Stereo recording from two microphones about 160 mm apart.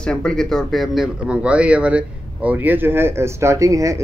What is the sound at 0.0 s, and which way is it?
Speech, 5° left (ahead or behind).